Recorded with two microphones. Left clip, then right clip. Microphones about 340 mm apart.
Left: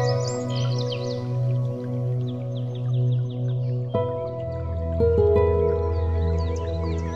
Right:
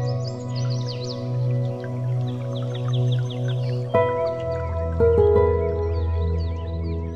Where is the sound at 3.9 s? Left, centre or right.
Right.